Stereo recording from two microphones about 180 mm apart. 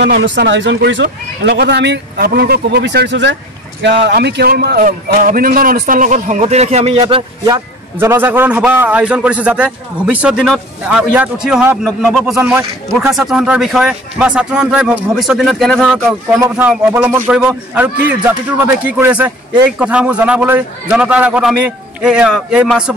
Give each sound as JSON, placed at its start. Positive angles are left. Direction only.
{"t": 0.2, "sound": "a man's voice", "side_deg": -80}
{"t": 16.3, "sound": "a man's voice", "side_deg": -10}